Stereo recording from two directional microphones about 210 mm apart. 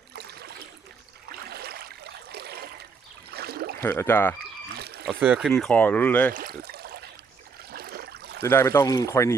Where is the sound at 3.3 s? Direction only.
50° right (ahead or behind).